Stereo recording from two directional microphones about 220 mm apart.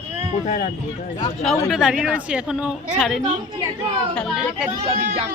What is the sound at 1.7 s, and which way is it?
Speech, centre (ahead or behind).